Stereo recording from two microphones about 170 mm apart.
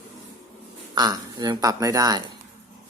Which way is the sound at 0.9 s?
25° right (ahead or behind).